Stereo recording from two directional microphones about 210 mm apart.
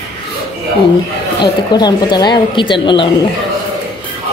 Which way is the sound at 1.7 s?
20° left (ahead or behind).